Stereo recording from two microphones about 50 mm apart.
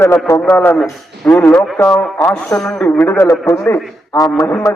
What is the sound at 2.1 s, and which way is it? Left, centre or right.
Speech, left.